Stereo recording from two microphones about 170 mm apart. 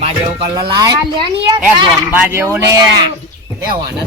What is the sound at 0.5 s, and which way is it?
Speech, 20° right (ahead or behind).